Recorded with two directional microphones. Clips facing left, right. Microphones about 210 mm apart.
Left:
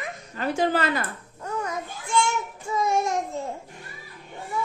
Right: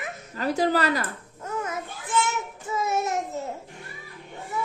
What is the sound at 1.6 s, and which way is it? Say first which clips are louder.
Child singing: left 1 dB; 5° right (ahead or behind).